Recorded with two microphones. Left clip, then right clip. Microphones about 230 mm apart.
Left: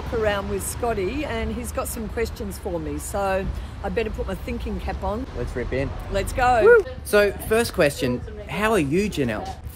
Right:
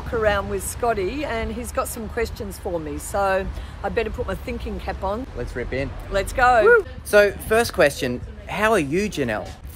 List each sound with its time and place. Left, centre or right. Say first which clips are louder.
0.2 s speech: right 3 dB; centre